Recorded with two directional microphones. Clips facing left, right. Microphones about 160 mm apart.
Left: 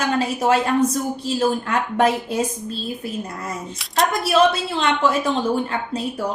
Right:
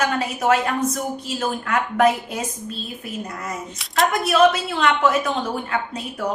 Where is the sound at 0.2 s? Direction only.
30° left (ahead or behind).